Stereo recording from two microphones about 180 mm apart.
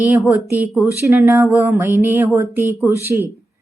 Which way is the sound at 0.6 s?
10° right (ahead or behind).